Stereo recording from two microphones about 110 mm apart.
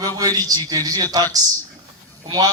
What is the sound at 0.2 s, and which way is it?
Speech, 35° right (ahead or behind).